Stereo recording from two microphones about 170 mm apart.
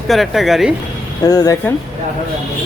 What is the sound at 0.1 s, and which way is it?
Speech, centre (ahead or behind).